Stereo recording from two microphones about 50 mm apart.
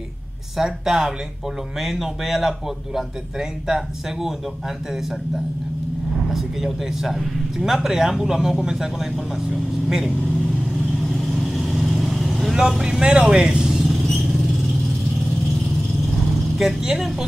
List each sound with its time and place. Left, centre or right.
0.6 s speech: centre
6.3 s speech: centre
11.1 s vehicle: centre
12.5 s speech: centre
13.0 s speech: centre
13.7 s vehicle: centre
16.5 s speech: centre